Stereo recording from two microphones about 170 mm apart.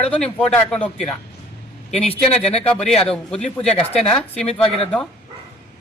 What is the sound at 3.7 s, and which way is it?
Speech, 35° left (ahead or behind).